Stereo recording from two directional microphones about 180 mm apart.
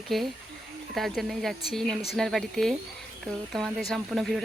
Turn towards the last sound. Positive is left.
turn(degrees=0)  # may be behind; listen again after turning